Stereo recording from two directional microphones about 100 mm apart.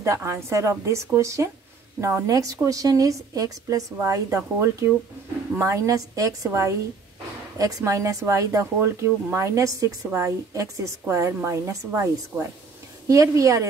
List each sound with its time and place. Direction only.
0.0 s speech: 30° right (ahead or behind)